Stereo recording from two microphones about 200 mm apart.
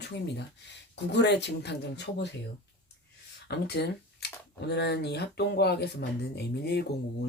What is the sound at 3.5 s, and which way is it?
Speech, 55° left (ahead or behind).